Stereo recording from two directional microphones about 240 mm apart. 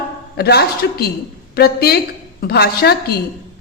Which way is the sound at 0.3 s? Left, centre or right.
Left.